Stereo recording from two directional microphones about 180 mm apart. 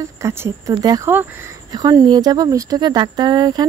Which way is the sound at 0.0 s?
15° right (ahead or behind).